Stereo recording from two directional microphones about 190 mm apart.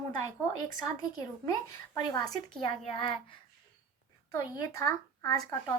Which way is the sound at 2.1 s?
20° left (ahead or behind).